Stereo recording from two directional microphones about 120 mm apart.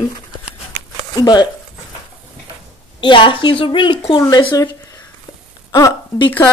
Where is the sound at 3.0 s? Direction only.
45° left (ahead or behind).